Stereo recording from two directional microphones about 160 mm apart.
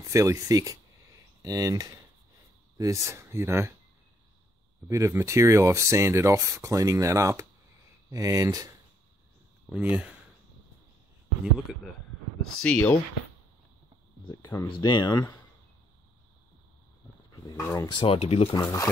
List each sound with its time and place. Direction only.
0.0 s speech: 20° right (ahead or behind)
4.8 s speech: 15° right (ahead or behind)
9.7 s speech: 10° right (ahead or behind)
11.7 s speech: 5° right (ahead or behind)
12.6 s speech: 10° left (ahead or behind)
14.6 s speech: 25° left (ahead or behind)
17.3 s a sound: 25° left (ahead or behind)
17.8 s speech: 30° left (ahead or behind)
18.6 s speech: 20° left (ahead or behind)